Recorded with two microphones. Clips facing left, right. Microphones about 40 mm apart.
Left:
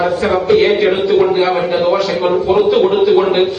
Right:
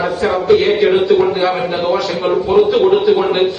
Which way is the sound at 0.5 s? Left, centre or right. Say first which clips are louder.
Right 1 dB; centre.